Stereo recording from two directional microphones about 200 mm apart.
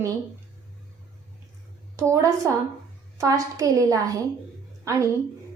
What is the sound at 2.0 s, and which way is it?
A woman's voice, 15° right (ahead or behind).